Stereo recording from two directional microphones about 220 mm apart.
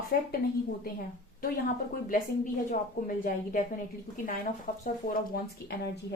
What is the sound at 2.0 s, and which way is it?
Speech, 35° left (ahead or behind).